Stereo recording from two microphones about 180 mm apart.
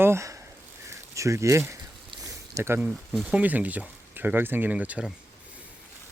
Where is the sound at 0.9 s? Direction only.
15° right (ahead or behind).